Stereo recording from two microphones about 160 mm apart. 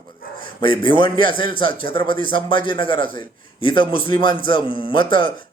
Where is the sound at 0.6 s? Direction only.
30° left (ahead or behind).